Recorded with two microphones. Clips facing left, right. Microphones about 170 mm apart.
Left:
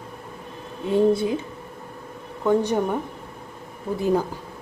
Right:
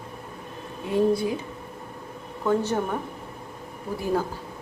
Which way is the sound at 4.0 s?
15° left (ahead or behind).